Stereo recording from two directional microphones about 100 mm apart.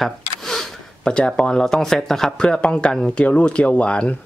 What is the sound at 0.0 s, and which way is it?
Speech, 5° left (ahead or behind).